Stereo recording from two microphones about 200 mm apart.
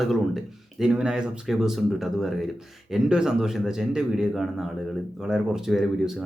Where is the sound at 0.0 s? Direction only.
Centre (ahead or behind).